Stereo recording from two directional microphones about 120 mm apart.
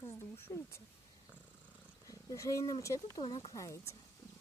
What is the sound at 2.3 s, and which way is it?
Speech, 30° left (ahead or behind).